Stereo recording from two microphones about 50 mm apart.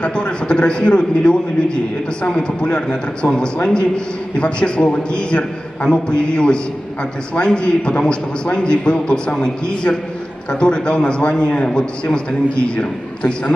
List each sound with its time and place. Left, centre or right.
0.0 s a man's voice: left